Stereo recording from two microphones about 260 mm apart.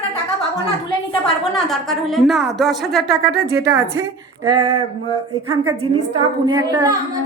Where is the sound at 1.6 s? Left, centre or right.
Centre.